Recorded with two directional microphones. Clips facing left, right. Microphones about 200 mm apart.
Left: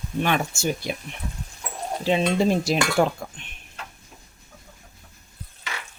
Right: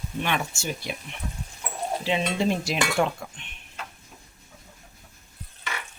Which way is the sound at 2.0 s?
40° left (ahead or behind).